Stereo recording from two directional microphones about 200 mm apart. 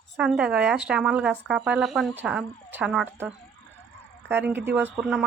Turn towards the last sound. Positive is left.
turn(degrees=-5)  # may be behind; listen again after turning